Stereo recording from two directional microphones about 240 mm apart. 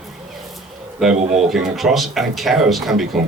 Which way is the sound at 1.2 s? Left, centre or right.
Right.